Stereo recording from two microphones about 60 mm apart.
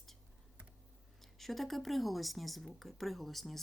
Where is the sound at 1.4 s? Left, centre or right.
Centre.